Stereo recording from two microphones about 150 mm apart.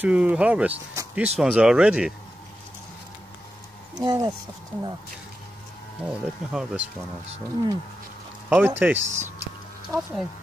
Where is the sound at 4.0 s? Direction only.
25° right (ahead or behind).